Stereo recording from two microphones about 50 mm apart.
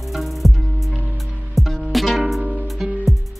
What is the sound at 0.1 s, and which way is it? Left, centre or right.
Music, centre.